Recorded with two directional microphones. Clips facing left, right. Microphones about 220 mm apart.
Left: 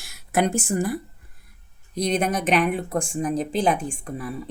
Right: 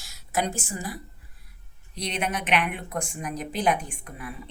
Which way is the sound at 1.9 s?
40° left (ahead or behind).